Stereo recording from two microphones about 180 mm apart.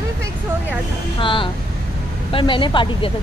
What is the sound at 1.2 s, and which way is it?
Speech, 30° left (ahead or behind).